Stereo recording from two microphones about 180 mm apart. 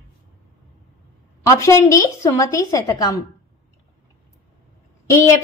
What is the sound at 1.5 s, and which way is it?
A woman's voice, 15° left (ahead or behind).